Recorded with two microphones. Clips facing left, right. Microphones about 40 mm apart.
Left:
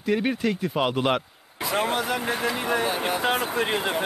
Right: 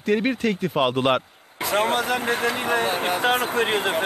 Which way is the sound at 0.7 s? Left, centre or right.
Centre.